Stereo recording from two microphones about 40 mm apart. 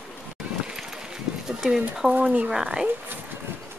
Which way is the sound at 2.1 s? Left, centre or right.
Right.